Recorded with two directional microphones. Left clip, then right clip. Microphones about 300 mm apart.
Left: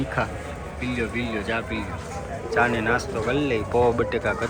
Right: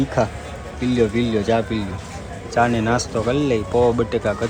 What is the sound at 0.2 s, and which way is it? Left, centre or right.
Speech, centre.